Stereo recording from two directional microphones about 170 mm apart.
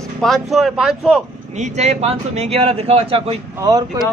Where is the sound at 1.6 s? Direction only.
40° right (ahead or behind).